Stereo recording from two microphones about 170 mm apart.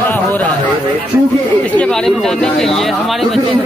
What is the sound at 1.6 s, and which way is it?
Speech, 5° left (ahead or behind).